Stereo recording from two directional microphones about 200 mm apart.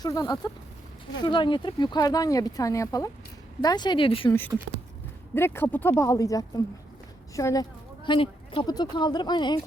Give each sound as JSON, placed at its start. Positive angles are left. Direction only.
{"t": 0.0, "sound": "speech", "side_deg": 15}
{"t": 4.3, "sound": "speech", "side_deg": 10}